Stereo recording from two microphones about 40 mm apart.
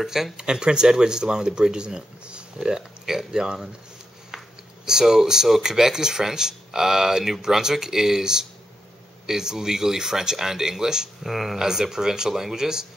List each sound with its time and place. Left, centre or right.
0.0 s speech: centre
0.4 s speech: right
2.7 s speech: centre
4.8 s speech: centre
11.2 s speech: centre
11.5 s speech: centre